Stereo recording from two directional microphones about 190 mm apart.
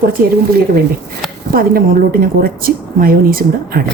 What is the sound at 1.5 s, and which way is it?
A woman's voice, 50° right (ahead or behind).